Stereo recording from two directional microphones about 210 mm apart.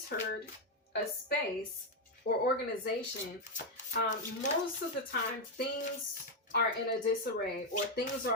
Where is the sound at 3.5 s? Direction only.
35° left (ahead or behind).